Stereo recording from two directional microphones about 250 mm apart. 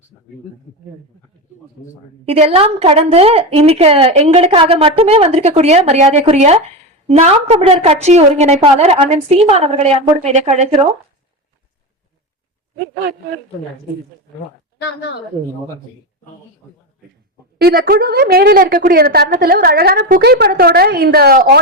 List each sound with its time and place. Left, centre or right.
2.2 s a woman's voice: right
14.8 s speech: left
17.6 s a woman's voice: right